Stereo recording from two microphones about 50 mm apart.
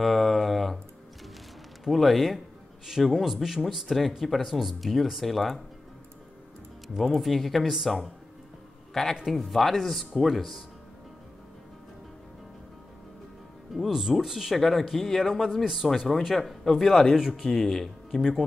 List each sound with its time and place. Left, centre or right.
0.0 s a sound: centre
1.9 s speech: centre
7.2 s speech: centre
9.1 s speech: centre
13.7 s speech: centre